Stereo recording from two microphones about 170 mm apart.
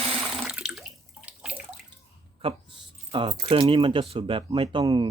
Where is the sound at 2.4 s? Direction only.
30° right (ahead or behind).